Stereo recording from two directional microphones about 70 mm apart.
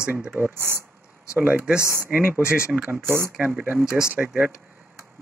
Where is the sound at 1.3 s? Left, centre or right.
Centre.